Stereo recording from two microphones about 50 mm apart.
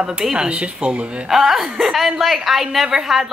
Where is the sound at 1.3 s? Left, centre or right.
Centre.